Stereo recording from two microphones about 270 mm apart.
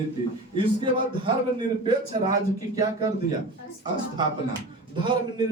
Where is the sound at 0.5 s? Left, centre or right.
Centre.